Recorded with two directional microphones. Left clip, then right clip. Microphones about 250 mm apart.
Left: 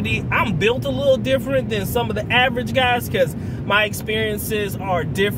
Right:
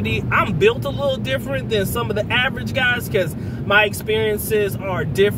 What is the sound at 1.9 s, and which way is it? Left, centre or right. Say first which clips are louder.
Speech: left 1 dB; centre.